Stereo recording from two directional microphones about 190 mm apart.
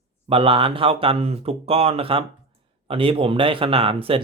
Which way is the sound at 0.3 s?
30° right (ahead or behind).